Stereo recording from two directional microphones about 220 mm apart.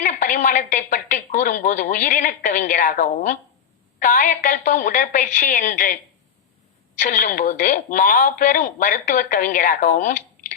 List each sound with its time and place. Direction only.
0.0 s a woman's voice: 35° left (ahead or behind)
7.0 s a woman's voice: 35° left (ahead or behind)